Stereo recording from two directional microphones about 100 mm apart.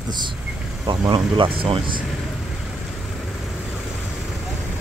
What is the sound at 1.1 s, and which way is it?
Speech, 60° right (ahead or behind).